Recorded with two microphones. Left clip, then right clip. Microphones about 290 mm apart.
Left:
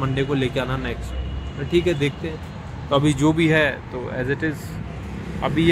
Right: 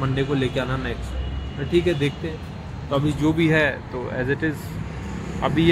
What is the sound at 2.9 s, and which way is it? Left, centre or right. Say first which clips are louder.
Speech: left 3 dB; centre.